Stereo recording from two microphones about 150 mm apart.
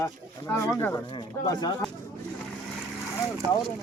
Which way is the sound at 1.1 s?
30° left (ahead or behind).